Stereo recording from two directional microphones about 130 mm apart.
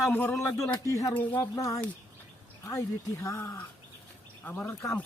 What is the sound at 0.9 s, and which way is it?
Speech, 25° left (ahead or behind).